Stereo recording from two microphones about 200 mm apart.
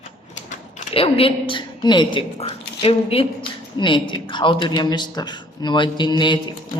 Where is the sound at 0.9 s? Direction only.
30° left (ahead or behind).